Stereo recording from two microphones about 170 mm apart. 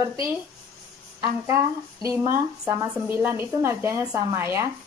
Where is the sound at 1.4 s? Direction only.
20° right (ahead or behind).